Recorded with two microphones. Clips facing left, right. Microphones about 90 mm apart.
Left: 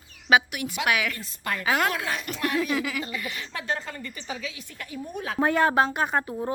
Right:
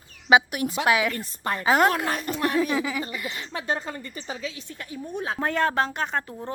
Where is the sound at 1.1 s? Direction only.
35° right (ahead or behind).